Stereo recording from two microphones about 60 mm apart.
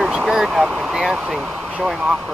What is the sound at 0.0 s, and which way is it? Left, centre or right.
Speech, centre.